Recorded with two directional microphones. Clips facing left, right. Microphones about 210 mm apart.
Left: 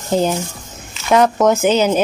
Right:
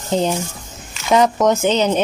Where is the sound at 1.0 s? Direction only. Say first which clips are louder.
Left 1 dB; centre (ahead or behind).